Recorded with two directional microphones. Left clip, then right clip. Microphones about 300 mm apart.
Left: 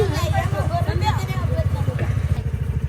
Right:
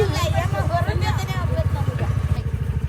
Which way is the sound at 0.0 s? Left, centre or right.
Centre.